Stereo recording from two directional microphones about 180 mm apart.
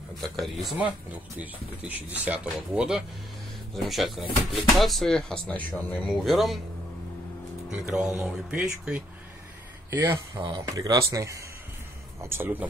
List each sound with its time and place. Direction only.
0.2 s speech: centre (ahead or behind)
7.7 s speech: 5° right (ahead or behind)